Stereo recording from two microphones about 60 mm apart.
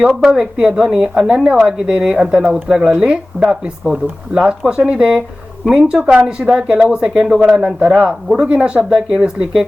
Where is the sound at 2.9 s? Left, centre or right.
Centre.